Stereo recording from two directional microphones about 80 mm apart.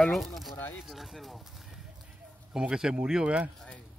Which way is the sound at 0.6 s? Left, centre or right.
Left.